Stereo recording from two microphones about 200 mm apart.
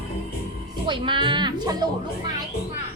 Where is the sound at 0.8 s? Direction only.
25° right (ahead or behind).